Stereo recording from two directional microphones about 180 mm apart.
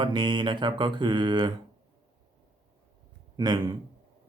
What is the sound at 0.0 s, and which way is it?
Speech, 25° right (ahead or behind).